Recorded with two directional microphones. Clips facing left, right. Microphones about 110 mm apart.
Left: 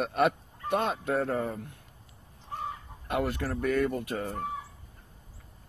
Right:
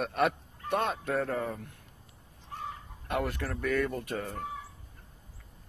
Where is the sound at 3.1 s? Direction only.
5° left (ahead or behind).